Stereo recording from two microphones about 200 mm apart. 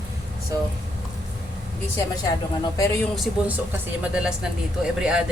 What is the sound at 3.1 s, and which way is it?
Speech, 5° right (ahead or behind).